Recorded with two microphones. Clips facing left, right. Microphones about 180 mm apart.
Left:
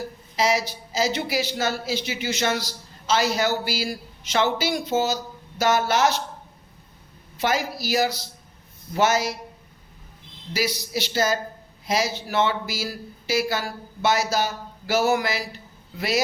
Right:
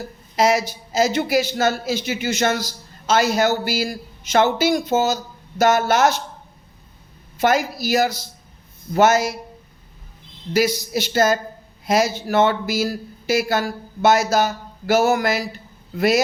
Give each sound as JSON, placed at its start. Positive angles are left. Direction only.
{"t": 0.3, "sound": "a man's voice", "side_deg": -50}
{"t": 7.3, "sound": "a man's voice", "side_deg": -50}
{"t": 10.5, "sound": "a man's voice", "side_deg": -50}